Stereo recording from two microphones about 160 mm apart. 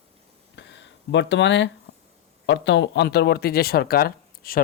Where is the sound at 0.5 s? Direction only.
90° left.